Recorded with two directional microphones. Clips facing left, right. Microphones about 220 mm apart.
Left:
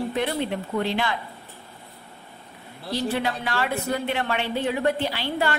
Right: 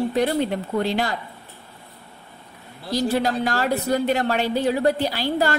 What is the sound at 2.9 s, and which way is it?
A woman's voice, 40° right (ahead or behind).